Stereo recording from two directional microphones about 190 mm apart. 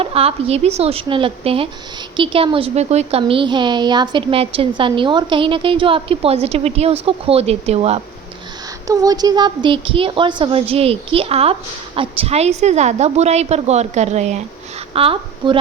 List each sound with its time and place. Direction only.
0.0 s a woman's voice: 30° right (ahead or behind)
8.9 s a woman's voice: 20° right (ahead or behind)